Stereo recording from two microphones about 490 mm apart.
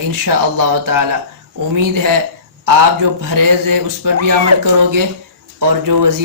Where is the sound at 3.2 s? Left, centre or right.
Right.